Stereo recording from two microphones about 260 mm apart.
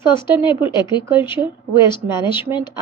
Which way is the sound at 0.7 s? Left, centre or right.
Centre.